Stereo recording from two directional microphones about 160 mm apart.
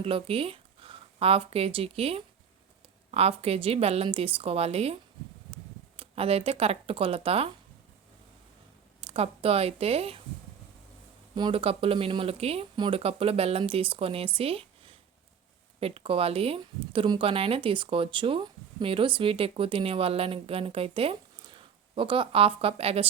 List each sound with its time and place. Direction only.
0.0 s speech: 35° right (ahead or behind)
6.0 s speech: 40° right (ahead or behind)
9.0 s a woman's voice: 35° right (ahead or behind)
11.3 s speech: 30° right (ahead or behind)
14.3 s a sound: 35° right (ahead or behind)
15.8 s speech: 35° right (ahead or behind)